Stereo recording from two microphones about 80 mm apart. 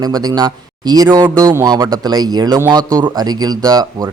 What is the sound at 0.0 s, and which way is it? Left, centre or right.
Speech, right.